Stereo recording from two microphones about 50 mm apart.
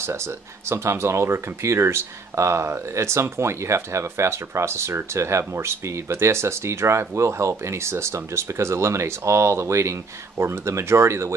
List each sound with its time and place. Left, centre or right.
0.0 s speech: right
5.4 s speech: right
10.3 s speech: right